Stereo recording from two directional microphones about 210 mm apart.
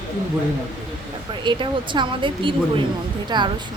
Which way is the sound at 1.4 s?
20° right (ahead or behind).